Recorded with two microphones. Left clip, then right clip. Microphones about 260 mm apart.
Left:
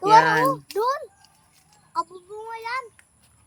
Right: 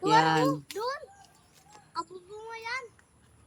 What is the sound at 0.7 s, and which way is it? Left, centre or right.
Speech, left.